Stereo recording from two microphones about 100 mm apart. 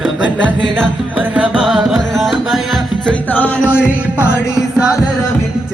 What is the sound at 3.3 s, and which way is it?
Music, 15° left (ahead or behind).